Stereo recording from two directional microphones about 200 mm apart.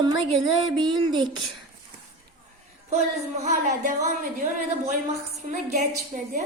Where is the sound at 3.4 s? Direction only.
35° right (ahead or behind).